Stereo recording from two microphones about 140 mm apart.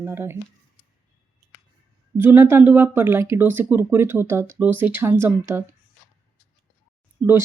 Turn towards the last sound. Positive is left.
turn(degrees=-20)  # may be behind; listen again after turning